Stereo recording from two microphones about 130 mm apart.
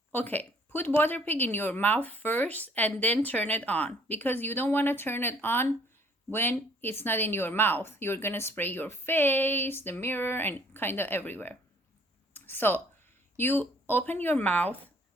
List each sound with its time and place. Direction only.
0.1 s speech: 15° left (ahead or behind)
12.3 s a sound: 15° left (ahead or behind)
13.3 s speech: 15° left (ahead or behind)